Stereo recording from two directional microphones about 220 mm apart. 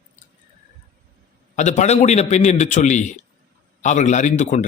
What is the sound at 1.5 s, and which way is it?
A man's voice, 35° left (ahead or behind).